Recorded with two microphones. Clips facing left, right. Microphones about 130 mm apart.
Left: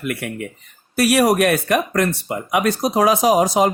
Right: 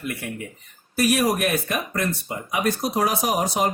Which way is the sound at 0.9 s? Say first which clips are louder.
Left 5 dB; 80° left.